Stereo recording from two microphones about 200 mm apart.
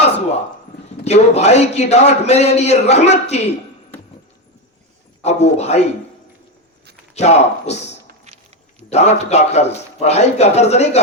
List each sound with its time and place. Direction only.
1.0 s a man's voice: 35° left (ahead or behind)
5.2 s a man's voice: 35° left (ahead or behind)
7.2 s a man's voice: 35° left (ahead or behind)
8.3 s a sound: 35° right (ahead or behind)
8.9 s a man's voice: 35° left (ahead or behind)